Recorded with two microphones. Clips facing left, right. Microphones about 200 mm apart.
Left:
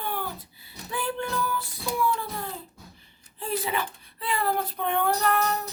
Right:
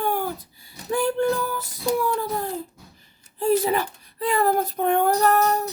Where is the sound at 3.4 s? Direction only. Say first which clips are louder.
Right 9 dB; 40° right (ahead or behind).